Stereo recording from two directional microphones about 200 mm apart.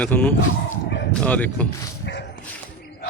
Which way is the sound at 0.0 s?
10° left (ahead or behind).